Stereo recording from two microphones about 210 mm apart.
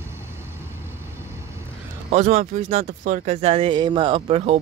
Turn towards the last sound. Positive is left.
turn(degrees=-25)  # may be behind; listen again after turning